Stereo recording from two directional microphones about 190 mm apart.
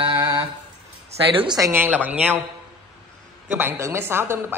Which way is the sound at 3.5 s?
10° right (ahead or behind).